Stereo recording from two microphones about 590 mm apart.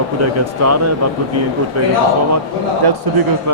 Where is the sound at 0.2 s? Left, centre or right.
Right.